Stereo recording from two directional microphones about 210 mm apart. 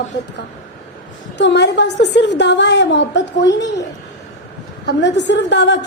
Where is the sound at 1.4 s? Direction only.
55° left (ahead or behind).